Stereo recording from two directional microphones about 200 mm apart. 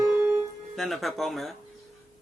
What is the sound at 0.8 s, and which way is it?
Music, centre (ahead or behind).